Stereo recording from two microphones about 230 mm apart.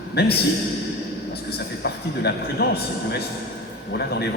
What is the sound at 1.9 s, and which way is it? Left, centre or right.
Speech, left.